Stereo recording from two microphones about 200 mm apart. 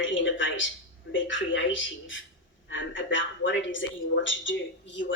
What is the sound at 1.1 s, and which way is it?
Speech, 70° left (ahead or behind).